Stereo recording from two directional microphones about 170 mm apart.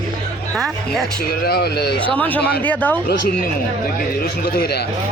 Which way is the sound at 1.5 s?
70° left (ahead or behind).